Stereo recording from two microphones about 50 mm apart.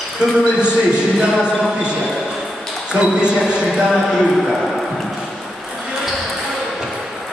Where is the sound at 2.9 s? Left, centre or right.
Centre.